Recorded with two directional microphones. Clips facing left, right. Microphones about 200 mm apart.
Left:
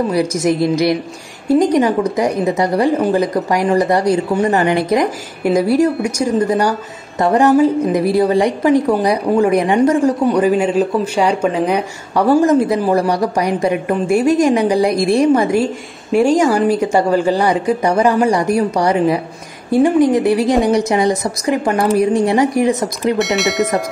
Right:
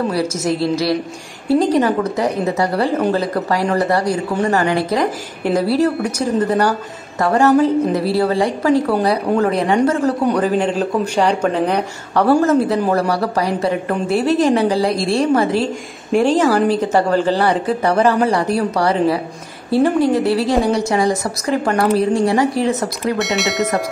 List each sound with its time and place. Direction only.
0.1 s speech: 15° left (ahead or behind)
23.1 s speech: centre (ahead or behind)